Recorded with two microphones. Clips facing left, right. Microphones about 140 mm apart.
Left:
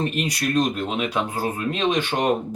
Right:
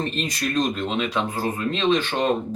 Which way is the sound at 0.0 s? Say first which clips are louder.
Left 2 dB; 10° left (ahead or behind).